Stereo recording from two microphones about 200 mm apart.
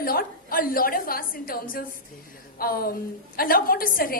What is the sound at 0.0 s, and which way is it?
A woman's voice, 45° left (ahead or behind).